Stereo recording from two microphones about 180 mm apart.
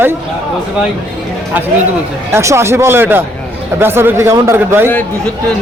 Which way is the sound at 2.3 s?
15° right (ahead or behind).